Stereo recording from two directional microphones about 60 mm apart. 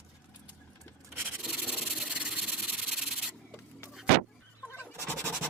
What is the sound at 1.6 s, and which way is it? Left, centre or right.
Rub, right.